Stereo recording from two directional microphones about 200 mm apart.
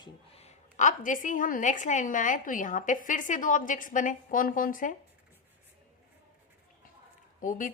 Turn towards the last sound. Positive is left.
turn(degrees=40)  # may be behind; listen again after turning